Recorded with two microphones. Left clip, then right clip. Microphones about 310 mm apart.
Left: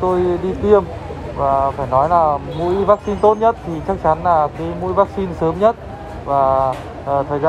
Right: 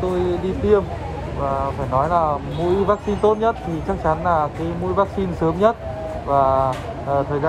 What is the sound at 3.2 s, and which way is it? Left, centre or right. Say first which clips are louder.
Speech: left 3 dB; centre.